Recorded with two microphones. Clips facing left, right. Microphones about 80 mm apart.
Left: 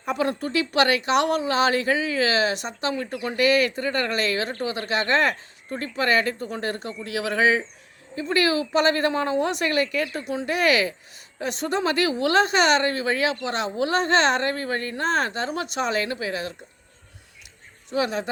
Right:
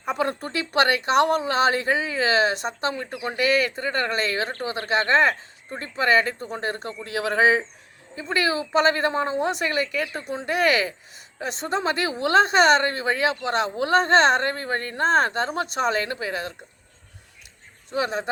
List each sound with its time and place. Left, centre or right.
0.0 s a woman's voice: right
17.9 s speech: right